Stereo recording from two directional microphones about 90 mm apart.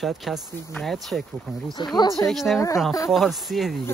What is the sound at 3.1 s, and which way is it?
Speech, centre (ahead or behind).